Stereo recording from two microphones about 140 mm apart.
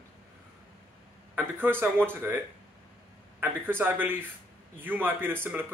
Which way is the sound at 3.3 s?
15° right (ahead or behind).